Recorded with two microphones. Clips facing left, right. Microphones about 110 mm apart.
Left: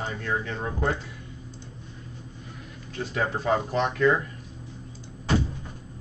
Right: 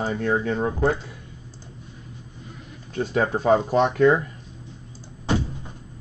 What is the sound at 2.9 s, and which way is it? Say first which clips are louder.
Speech: right 6 dB; 40° right (ahead or behind).